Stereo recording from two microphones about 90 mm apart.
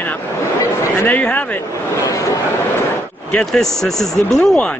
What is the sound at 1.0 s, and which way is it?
Speech, 20° left (ahead or behind).